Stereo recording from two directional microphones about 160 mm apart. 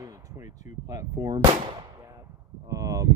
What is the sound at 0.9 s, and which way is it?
Speech, 20° right (ahead or behind).